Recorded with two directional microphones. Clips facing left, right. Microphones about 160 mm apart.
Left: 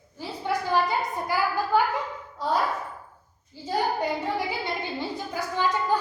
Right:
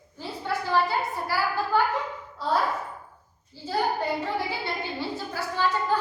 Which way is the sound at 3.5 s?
15° left (ahead or behind).